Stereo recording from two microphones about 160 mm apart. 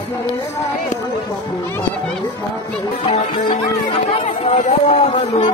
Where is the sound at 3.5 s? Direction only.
30° left (ahead or behind).